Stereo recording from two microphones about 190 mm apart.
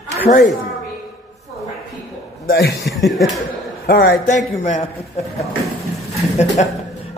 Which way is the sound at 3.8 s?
55° left (ahead or behind).